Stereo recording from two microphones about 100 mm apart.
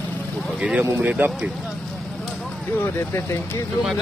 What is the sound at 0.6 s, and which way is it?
Speech, 15° right (ahead or behind).